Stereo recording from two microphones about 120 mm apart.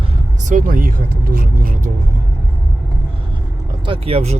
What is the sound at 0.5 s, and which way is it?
Speech, 90° right.